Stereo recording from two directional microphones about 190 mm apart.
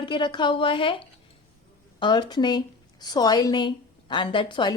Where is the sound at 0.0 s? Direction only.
25° left (ahead or behind).